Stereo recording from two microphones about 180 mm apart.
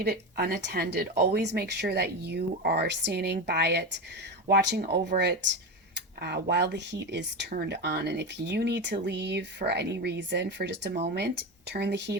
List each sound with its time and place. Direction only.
0.0 s speech: 60° right (ahead or behind)